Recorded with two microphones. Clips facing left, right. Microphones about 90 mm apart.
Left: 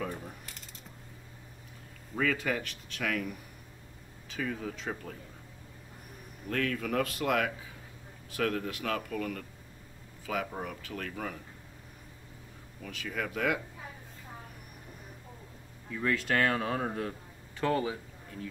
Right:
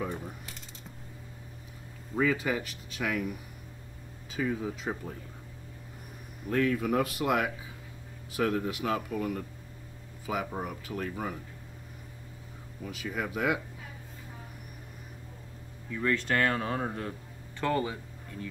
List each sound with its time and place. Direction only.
0.1 s speech: 5° right (ahead or behind)
2.1 s speech: 10° right (ahead or behind)
6.5 s speech: 15° right (ahead or behind)
12.8 s speech: 15° right (ahead or behind)
15.9 s speech: 5° left (ahead or behind)